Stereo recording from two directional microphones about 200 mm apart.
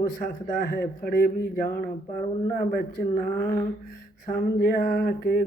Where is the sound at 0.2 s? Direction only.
45° left (ahead or behind).